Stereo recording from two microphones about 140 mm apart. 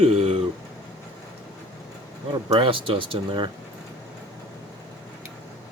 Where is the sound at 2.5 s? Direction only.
35° right (ahead or behind).